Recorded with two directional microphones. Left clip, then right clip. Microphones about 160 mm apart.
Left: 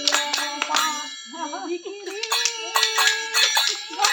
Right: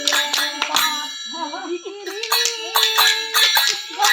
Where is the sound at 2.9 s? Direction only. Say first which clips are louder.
Right 4 dB; 35° left (ahead or behind).